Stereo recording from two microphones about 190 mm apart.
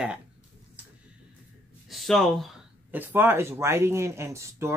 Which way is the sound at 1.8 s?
Centre (ahead or behind).